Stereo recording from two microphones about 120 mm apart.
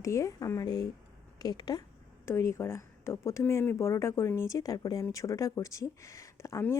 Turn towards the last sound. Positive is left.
turn(degrees=25)  # may be behind; listen again after turning